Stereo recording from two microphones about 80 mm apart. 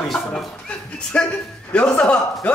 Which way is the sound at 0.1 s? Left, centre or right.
Centre.